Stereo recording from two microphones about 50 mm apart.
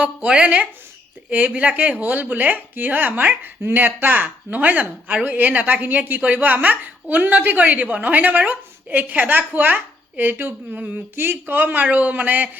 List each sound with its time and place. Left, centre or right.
0.0 s speech: right
10.8 s speech: right
11.1 s speech: right